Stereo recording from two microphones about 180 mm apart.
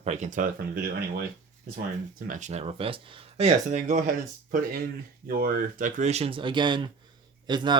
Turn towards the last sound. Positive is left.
turn(degrees=-25)  # may be behind; listen again after turning